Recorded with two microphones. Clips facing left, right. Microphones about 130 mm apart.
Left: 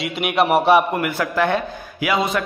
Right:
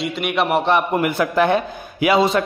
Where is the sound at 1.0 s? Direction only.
20° right (ahead or behind).